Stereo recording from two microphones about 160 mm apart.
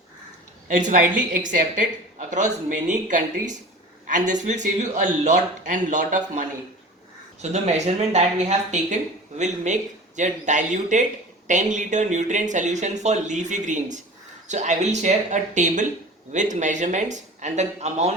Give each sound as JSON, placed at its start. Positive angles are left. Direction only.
{"t": 0.7, "sound": "speech", "side_deg": -55}
{"t": 7.5, "sound": "speech", "side_deg": -45}
{"t": 10.2, "sound": "speech", "side_deg": -50}